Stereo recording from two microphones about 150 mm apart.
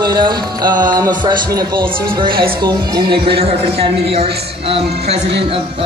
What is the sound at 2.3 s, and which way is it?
Speech, 35° right (ahead or behind).